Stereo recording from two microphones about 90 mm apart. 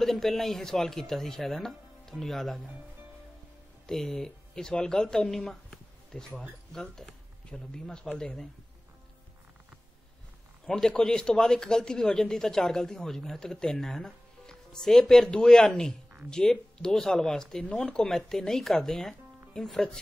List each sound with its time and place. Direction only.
0.0 s a man's voice: 5° left (ahead or behind)
3.8 s speech: 5° left (ahead or behind)
10.7 s a man's voice: 5° left (ahead or behind)